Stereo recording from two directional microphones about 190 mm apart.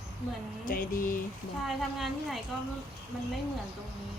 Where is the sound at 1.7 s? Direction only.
Centre (ahead or behind).